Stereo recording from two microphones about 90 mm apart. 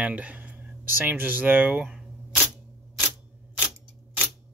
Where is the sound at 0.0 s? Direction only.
15° right (ahead or behind).